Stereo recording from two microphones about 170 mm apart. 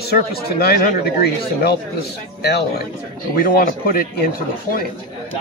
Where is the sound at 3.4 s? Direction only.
60° left (ahead or behind).